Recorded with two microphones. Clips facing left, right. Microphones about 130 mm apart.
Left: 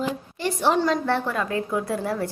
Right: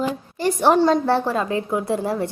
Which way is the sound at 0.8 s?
30° right (ahead or behind).